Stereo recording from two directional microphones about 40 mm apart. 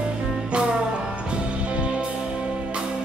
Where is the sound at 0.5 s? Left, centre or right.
Right.